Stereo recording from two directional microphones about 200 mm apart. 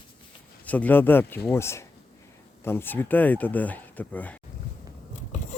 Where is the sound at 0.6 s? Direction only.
5° left (ahead or behind).